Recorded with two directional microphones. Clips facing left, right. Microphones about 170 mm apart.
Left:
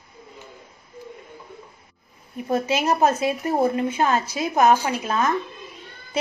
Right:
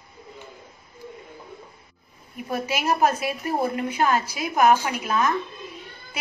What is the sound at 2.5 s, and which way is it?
A woman's voice, 25° left (ahead or behind).